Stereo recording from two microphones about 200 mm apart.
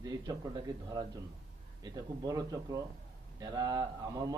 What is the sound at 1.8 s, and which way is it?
A man's voice, 20° right (ahead or behind).